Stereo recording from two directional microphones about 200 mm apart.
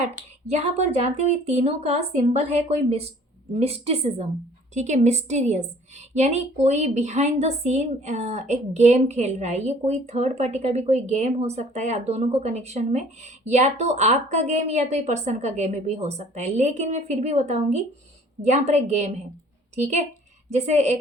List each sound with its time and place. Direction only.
0.4 s a woman's voice: 30° right (ahead or behind)